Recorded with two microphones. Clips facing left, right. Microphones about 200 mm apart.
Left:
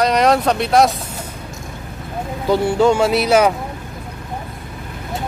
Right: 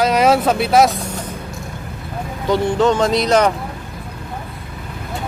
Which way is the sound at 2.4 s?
10° left (ahead or behind).